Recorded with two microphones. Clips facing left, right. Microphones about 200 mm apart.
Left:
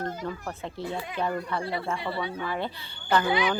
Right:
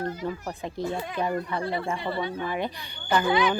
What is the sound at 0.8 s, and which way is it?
Speech, 45° right (ahead or behind).